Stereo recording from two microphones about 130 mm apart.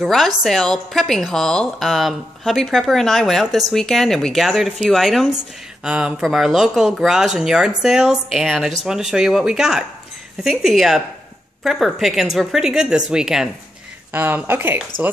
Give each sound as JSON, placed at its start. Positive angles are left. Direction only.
{"t": 0.0, "sound": "a woman's voice", "side_deg": 0}
{"t": 14.1, "sound": "speech", "side_deg": -15}